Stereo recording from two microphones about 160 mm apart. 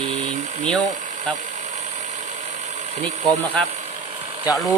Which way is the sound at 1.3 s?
5° left (ahead or behind).